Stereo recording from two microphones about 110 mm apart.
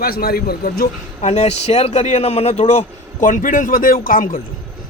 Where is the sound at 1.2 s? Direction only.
90° left.